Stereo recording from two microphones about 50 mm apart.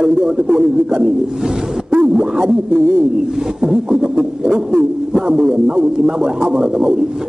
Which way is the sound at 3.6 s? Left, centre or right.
Centre.